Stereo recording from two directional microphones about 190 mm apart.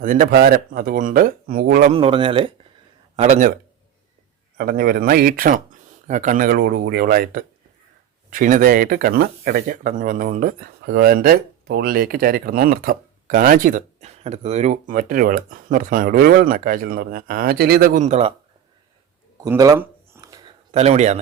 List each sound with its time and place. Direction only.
0.0 s speech: 45° right (ahead or behind)
1.9 s speech: 30° right (ahead or behind)
3.2 s speech: 40° right (ahead or behind)
4.5 s speech: 50° right (ahead or behind); by 18.3 s 35° right (ahead or behind)
19.4 s a sound: 20° right (ahead or behind)
20.7 s speech: 35° right (ahead or behind)